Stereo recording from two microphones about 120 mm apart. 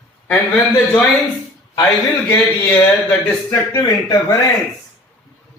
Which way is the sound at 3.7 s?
30° left (ahead or behind).